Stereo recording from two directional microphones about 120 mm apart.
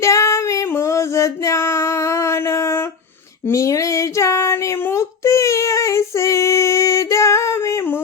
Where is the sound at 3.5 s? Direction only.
25° left (ahead or behind).